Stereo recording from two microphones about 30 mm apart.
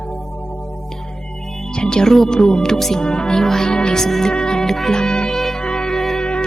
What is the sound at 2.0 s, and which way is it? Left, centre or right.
Speech, centre.